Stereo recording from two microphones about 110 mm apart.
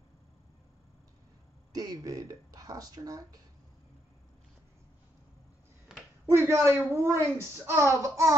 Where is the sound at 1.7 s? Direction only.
35° right (ahead or behind).